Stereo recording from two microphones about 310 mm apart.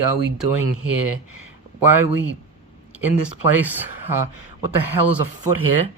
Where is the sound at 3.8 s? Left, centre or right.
Right.